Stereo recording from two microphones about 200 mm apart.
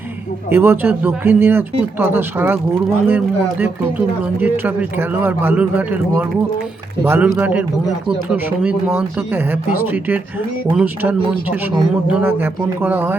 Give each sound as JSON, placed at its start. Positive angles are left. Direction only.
{"t": 0.5, "sound": "a man's voice", "side_deg": -10}